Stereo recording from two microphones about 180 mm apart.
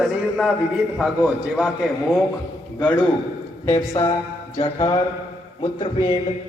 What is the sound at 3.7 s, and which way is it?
Speech, 20° left (ahead or behind).